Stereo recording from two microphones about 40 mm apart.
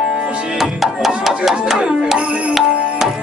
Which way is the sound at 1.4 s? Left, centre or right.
Centre.